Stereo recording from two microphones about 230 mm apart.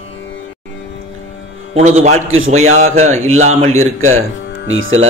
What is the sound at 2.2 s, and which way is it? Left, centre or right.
Speech, right.